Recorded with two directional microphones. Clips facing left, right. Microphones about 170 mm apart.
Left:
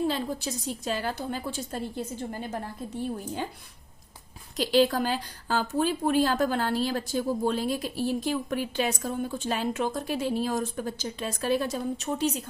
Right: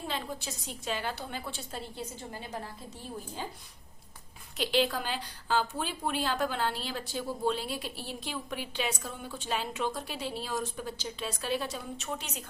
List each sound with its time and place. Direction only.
0.1 s a woman's voice: 40° left (ahead or behind)
4.5 s a woman's voice: 40° left (ahead or behind)